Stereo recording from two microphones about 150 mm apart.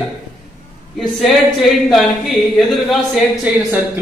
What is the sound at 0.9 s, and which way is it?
A man's voice, centre (ahead or behind).